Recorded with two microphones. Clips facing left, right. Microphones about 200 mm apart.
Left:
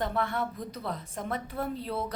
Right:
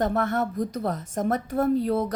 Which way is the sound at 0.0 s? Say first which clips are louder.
Right 6 dB; 45° right (ahead or behind).